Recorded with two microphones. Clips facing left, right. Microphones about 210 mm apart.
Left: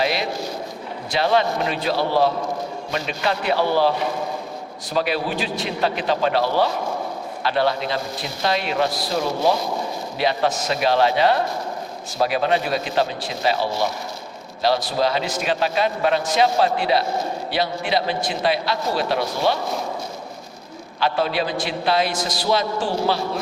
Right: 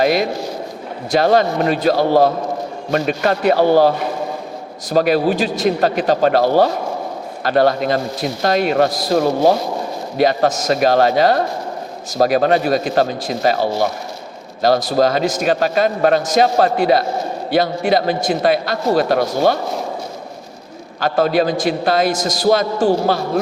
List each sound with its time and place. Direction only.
0.0 s a man's voice: 45° right (ahead or behind)
14.8 s a man's voice: 45° right (ahead or behind)
21.0 s a man's voice: 45° right (ahead or behind)